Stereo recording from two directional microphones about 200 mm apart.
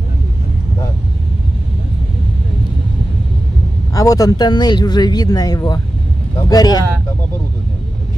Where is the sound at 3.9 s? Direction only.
20° left (ahead or behind).